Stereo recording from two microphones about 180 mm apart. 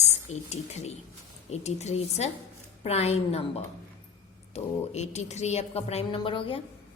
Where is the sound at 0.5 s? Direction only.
40° left (ahead or behind).